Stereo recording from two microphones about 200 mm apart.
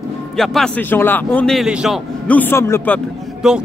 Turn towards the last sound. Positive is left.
turn(degrees=-5)  # may be behind; listen again after turning